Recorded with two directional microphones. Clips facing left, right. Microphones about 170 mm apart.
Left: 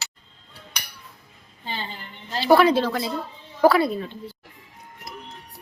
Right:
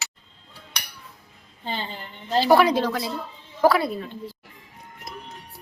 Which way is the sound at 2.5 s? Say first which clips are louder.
Left 2 dB; 15° right (ahead or behind).